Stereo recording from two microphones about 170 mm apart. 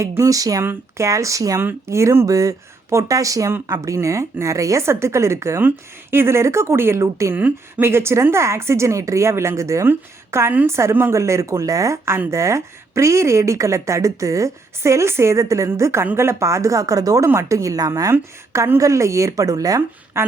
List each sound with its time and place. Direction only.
0.0 s speech: 20° right (ahead or behind)